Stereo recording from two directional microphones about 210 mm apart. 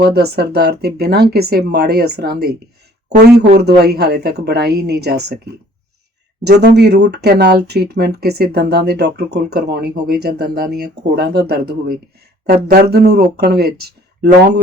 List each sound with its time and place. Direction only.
0.0 s speech: 50° right (ahead or behind)
3.8 s speech: 50° right (ahead or behind)
6.4 s speech: 50° right (ahead or behind)